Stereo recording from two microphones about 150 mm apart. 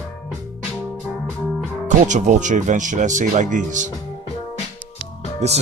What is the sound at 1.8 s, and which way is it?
Speech, 55° right (ahead or behind).